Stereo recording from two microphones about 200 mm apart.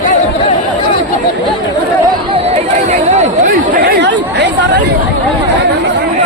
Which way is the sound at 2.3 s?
35° right (ahead or behind).